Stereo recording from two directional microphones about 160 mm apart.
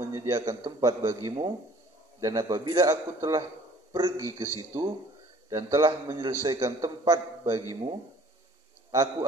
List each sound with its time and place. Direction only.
0.0 s a man's voice: 20° right (ahead or behind)